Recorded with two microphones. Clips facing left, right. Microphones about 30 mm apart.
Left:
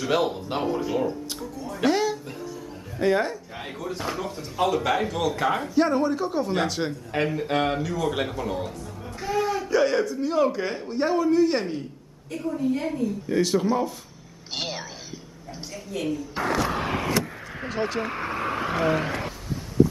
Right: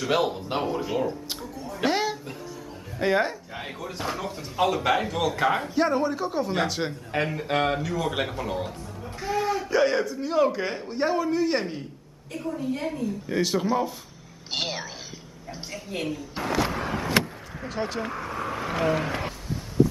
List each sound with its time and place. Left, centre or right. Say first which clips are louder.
0.0 s speech: left 1 dB; centre
1.3 s music: left 1 dB; centre
3.0 s a man's voice: left 1 dB; centre
15.9 s speech: left 2 dB; right
16.4 s speech: left 4 dB; centre
16.7 s vehicle: left 2 dB; left
17.6 s speech: left 3 dB; centre
18.0 s speech: left 3 dB; left
18.7 s speech: even; centre